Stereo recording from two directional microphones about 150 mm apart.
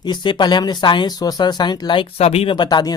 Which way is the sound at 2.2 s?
45° left (ahead or behind).